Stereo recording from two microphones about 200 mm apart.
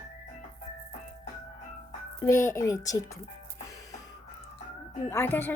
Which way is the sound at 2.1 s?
15° left (ahead or behind).